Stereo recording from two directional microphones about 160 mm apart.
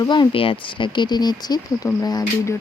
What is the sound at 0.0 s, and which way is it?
Speech, 30° left (ahead or behind).